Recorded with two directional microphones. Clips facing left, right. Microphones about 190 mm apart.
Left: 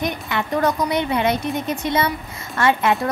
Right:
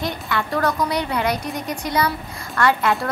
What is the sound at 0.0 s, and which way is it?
A woman's voice, 20° left (ahead or behind).